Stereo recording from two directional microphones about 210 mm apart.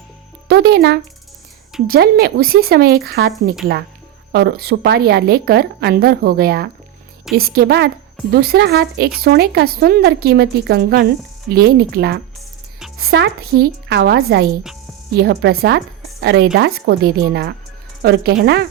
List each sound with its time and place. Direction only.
0.4 s a woman's voice: 50° right (ahead or behind)